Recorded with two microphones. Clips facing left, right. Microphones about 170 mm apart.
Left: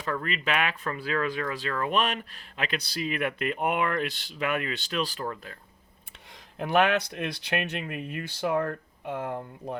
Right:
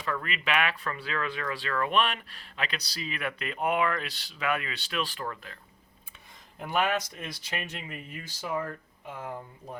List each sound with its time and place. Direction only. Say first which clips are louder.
0.0 s speech: left 2 dB; 40° left (ahead or behind)
6.6 s speech: left 5 dB; 75° left (ahead or behind)